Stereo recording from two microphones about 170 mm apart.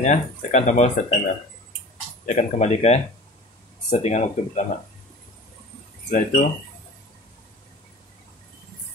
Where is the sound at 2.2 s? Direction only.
40° left (ahead or behind).